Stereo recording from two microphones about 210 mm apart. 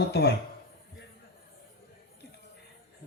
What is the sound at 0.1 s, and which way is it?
Speech, 50° left (ahead or behind).